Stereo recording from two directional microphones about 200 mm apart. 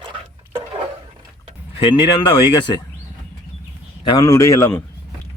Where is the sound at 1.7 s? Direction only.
25° left (ahead or behind).